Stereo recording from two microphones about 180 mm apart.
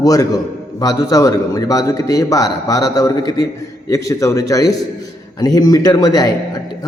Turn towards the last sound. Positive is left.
turn(degrees=20)  # may be behind; listen again after turning